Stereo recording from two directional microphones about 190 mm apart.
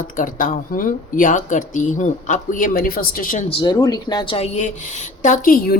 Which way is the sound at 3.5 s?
30° left (ahead or behind).